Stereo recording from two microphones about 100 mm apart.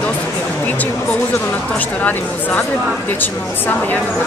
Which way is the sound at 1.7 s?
15° left (ahead or behind).